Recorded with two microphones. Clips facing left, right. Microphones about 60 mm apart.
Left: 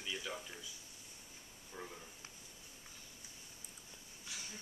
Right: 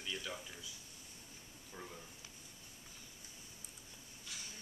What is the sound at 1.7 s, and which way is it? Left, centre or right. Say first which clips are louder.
Speech: left 2 dB; centre.